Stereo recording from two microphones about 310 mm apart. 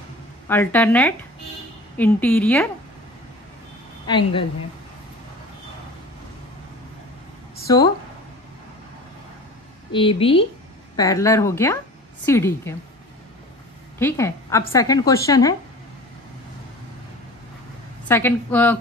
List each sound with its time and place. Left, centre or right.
0.5 s a woman's voice: centre
4.1 s a woman's voice: centre
7.6 s speech: centre
9.9 s a woman's voice: centre
13.9 s a woman's voice: centre
18.0 s a woman's voice: centre